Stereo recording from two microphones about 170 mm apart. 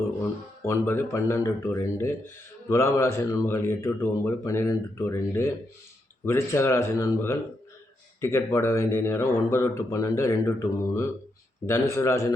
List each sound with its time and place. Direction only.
0.6 s speech: 15° left (ahead or behind)